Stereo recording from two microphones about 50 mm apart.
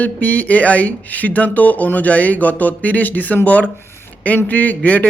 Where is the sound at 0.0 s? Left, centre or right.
Left.